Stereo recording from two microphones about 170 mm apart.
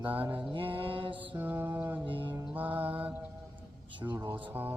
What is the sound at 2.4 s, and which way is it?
Mantra, 10° right (ahead or behind).